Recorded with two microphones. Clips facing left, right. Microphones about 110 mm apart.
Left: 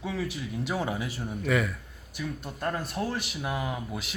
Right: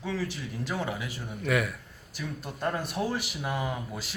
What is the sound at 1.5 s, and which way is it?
Speech, 5° right (ahead or behind).